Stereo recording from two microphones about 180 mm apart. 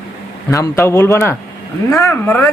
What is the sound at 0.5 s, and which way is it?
Speech, 15° left (ahead or behind).